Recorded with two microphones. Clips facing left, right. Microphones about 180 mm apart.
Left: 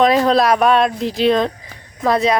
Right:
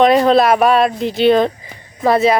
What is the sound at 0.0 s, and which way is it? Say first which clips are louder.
Speech: right 3 dB; centre (ahead or behind).